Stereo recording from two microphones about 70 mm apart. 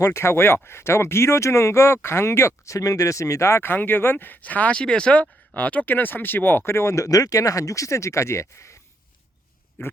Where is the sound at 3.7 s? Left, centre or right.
Left.